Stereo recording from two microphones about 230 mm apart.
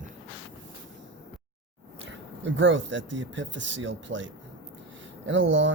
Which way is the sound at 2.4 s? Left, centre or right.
Right.